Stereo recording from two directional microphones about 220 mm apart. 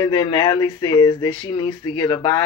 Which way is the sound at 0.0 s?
20° left (ahead or behind).